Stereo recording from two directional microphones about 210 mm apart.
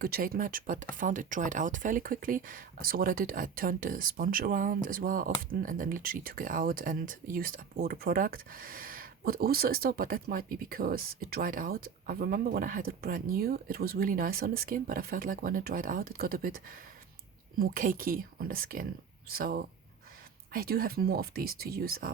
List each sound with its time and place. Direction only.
0.0 s speech: 45° right (ahead or behind)